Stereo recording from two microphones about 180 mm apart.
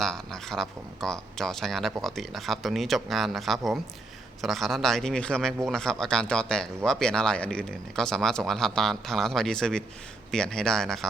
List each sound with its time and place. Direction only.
0.0 s speech: centre (ahead or behind)